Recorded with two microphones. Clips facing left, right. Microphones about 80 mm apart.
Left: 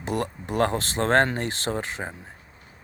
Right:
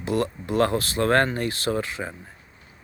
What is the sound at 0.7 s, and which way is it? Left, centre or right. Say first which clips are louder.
Speech: right 1 dB; left.